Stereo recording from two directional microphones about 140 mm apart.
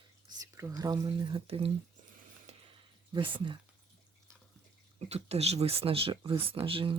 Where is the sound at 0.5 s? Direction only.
20° right (ahead or behind).